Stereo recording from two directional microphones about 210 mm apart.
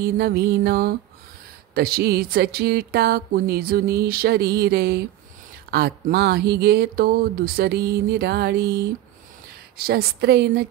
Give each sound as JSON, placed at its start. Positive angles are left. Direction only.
{"t": 0.0, "sound": "speech", "side_deg": -50}